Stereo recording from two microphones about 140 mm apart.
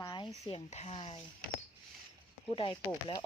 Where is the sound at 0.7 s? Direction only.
50° left (ahead or behind).